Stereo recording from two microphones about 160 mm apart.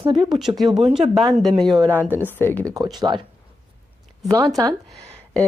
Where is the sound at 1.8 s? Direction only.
15° right (ahead or behind).